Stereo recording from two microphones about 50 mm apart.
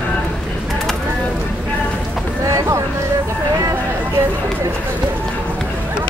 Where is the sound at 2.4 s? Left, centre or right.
Right.